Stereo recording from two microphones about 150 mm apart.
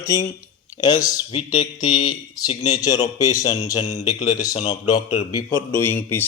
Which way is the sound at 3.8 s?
50° left (ahead or behind).